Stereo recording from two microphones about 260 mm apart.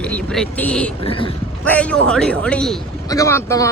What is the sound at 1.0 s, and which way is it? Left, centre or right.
Speech, centre.